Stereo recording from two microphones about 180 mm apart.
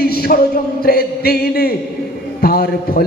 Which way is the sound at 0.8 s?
60° left (ahead or behind).